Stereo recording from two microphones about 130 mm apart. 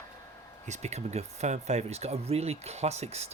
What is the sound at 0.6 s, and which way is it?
Speech, 60° right (ahead or behind).